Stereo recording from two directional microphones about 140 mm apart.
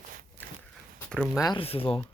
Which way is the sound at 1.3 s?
25° left (ahead or behind).